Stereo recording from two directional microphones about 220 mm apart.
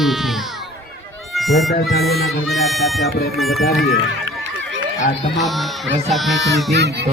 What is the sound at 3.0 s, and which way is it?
Speech, 45° left (ahead or behind).